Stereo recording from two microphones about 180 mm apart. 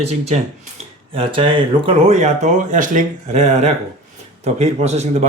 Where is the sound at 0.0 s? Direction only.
35° right (ahead or behind).